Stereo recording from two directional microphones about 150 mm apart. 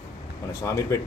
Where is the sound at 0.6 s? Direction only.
20° left (ahead or behind).